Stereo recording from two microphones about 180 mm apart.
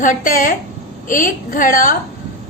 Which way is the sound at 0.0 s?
50° left (ahead or behind).